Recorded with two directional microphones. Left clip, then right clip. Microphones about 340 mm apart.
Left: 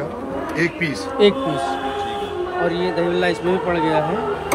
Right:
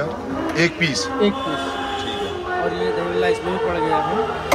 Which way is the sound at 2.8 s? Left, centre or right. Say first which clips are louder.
Left 1 dB; left.